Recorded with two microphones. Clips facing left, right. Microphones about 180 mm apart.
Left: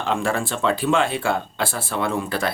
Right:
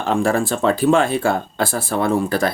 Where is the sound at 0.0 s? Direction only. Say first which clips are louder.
Right 5 dB; 40° right (ahead or behind).